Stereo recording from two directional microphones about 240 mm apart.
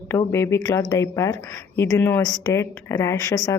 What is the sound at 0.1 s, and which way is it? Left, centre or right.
A woman's voice, centre.